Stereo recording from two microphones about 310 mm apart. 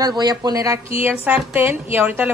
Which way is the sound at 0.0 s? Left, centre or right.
Centre.